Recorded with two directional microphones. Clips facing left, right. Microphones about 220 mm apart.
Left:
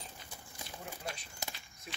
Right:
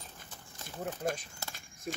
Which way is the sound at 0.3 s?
10° left (ahead or behind).